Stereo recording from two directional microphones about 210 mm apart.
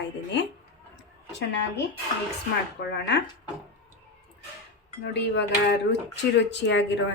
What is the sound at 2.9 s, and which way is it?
Speech, 55° left (ahead or behind).